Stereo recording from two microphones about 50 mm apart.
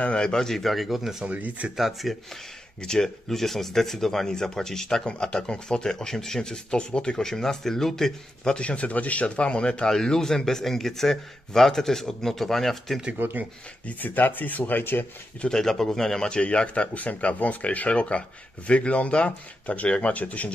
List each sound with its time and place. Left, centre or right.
0.0 s speech: centre
1.2 s speech: right
1.8 s speech: centre
2.8 s speech: centre
8.6 s speech: left; by 13.0 s centre
13.2 s speech: right
13.8 s speech: left
15.4 s speech: centre; by 20.5 s left